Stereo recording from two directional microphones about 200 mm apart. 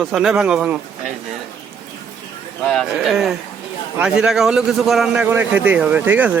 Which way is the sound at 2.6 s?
Centre (ahead or behind).